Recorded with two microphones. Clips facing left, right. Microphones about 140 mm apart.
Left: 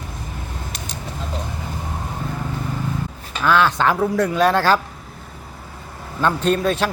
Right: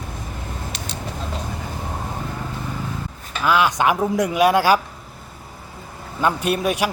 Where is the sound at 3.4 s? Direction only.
10° right (ahead or behind).